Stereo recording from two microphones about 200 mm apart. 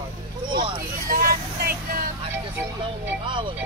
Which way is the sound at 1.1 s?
45° right (ahead or behind).